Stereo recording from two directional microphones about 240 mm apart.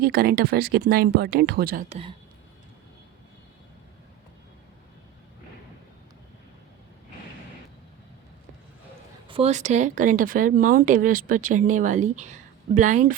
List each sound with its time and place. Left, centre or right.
0.0 s speech: right
1.9 s speech: right
9.2 s speech: right